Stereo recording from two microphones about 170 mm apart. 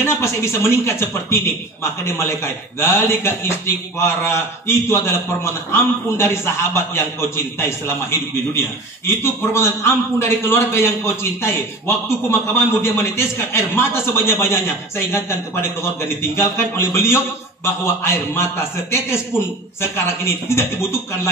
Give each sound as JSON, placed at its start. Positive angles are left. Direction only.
{"t": 0.0, "sound": "a man's voice", "side_deg": 15}